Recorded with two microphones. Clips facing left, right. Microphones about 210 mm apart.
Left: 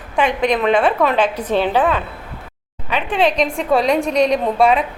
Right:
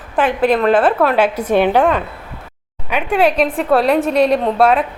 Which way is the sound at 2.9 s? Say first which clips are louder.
Right 3 dB; 10° right (ahead or behind).